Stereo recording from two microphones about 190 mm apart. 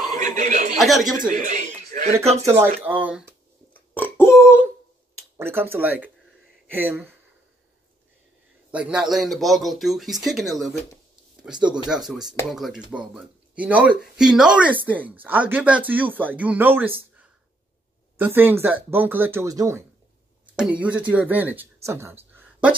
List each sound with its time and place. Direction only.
0.2 s a man's voice: 40° right (ahead or behind)
0.7 s speech: centre (ahead or behind)
1.3 s a sound: 40° right (ahead or behind)
2.4 s speech: 15° right (ahead or behind)
3.7 s burping: 10° left (ahead or behind)
5.4 s speech: 10° right (ahead or behind)
8.7 s speech: 5° right (ahead or behind)
20.5 s speech: 5° right (ahead or behind)